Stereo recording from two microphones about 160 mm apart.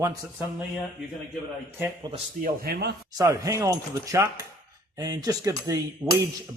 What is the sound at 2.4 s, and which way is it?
Speech, 70° right (ahead or behind).